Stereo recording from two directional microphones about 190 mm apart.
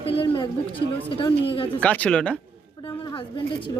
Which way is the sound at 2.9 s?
25° left (ahead or behind).